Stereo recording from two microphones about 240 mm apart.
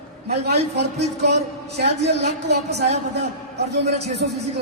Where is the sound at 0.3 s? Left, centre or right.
Right.